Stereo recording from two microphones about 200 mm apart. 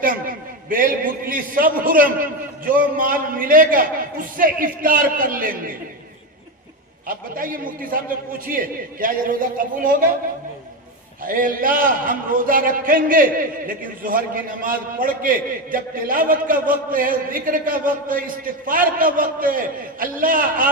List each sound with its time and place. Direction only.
0.0 s a man's voice: 45° right (ahead or behind)
7.1 s a man's voice: 45° right (ahead or behind)
11.2 s a man's voice: 45° right (ahead or behind)